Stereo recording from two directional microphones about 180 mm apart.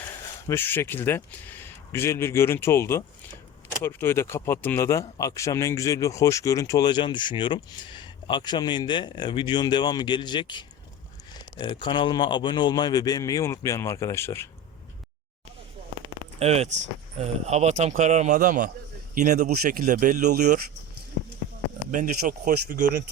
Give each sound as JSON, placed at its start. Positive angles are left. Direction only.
{"t": 0.4, "sound": "speech", "side_deg": 10}
{"t": 16.4, "sound": "a man's voice", "side_deg": -35}
{"t": 21.9, "sound": "speech", "side_deg": -45}